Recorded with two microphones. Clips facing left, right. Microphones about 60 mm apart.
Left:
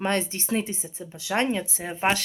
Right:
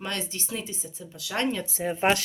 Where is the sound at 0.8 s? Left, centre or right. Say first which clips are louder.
Left 5 dB; left.